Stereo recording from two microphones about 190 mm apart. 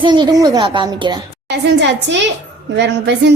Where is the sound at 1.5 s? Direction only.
65° right (ahead or behind).